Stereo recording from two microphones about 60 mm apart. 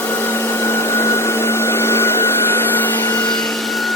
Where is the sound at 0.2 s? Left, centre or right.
Left.